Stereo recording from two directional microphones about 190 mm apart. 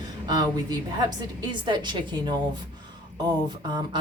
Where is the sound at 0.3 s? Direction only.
20° right (ahead or behind).